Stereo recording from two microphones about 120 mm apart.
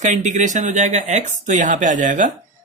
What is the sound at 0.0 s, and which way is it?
Speech, 90° right.